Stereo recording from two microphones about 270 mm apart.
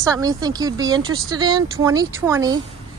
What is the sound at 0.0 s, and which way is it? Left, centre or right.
Speech, centre.